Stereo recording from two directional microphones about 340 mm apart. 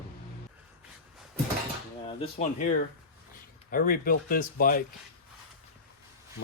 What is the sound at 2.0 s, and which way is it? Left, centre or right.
Speech, centre.